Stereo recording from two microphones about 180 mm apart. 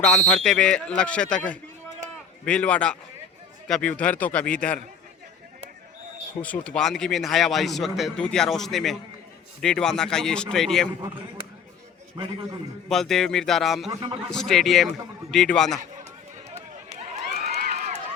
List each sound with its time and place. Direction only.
0.0 s a man's voice: 5° left (ahead or behind)
6.4 s a man's voice: 5° left (ahead or behind)
12.1 s a man's voice: 30° right (ahead or behind)
12.9 s a man's voice: centre (ahead or behind)
17.4 s crowd: 40° right (ahead or behind)